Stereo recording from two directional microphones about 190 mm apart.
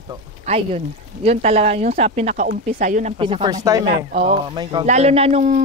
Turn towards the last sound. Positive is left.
turn(degrees=-35)  # may be behind; listen again after turning